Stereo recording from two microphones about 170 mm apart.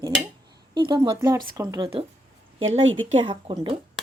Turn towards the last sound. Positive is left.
turn(degrees=-30)  # may be behind; listen again after turning